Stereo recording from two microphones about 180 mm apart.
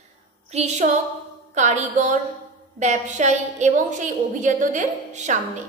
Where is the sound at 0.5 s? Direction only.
40° right (ahead or behind).